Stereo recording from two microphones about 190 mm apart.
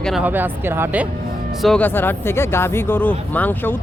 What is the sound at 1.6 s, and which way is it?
Speech, 5° left (ahead or behind).